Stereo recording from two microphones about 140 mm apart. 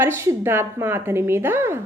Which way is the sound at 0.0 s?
15° right (ahead or behind).